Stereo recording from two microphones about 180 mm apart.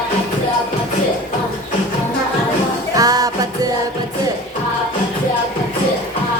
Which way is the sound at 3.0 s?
20° right (ahead or behind).